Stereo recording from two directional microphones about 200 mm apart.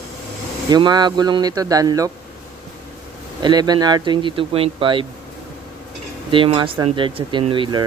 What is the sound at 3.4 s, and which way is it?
Speech, 20° right (ahead or behind).